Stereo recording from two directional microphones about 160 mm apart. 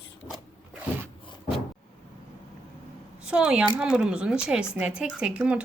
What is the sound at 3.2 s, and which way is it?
Speech, 5° right (ahead or behind).